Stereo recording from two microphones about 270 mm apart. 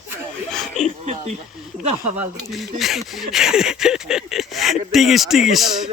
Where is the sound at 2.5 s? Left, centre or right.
Centre.